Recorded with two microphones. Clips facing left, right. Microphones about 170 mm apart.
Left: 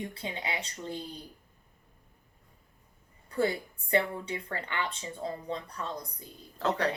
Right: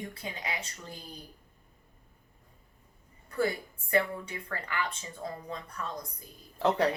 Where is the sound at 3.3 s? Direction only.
25° left (ahead or behind).